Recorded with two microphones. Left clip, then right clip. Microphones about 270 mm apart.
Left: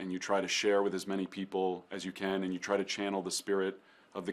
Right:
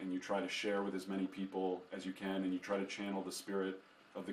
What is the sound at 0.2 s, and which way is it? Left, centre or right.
Speech, left.